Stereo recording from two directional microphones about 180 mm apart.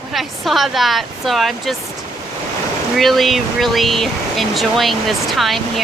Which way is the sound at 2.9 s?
Centre (ahead or behind).